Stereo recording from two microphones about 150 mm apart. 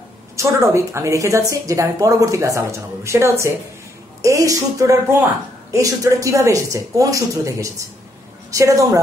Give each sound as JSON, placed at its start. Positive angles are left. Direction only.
{"t": 0.4, "sound": "a woman's voice", "side_deg": -20}